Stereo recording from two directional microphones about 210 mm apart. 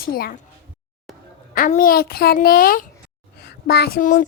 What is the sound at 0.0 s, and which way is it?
Speech, 45° left (ahead or behind).